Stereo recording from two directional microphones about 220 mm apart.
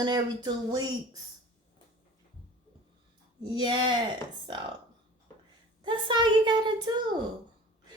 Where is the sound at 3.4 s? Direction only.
20° right (ahead or behind).